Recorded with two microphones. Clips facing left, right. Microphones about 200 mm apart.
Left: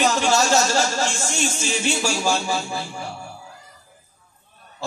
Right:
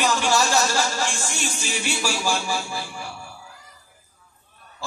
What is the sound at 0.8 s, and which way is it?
Music, 45° left (ahead or behind).